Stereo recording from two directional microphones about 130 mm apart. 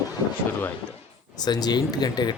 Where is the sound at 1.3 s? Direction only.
30° left (ahead or behind).